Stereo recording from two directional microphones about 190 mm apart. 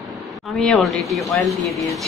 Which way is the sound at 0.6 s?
Centre (ahead or behind).